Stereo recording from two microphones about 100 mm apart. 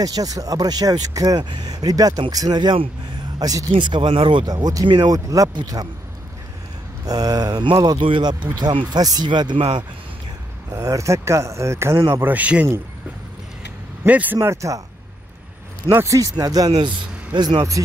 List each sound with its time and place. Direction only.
0.0 s speech: 40° right (ahead or behind)
3.7 s speech: 50° right (ahead or behind)
7.1 s speech: 40° right (ahead or behind)
10.7 s speech: 35° right (ahead or behind); by 12.6 s 15° right (ahead or behind)
14.0 s speech: 15° right (ahead or behind)
15.9 s speech: 30° right (ahead or behind); by 17.6 s 45° right (ahead or behind)
17.6 s speech: 35° right (ahead or behind)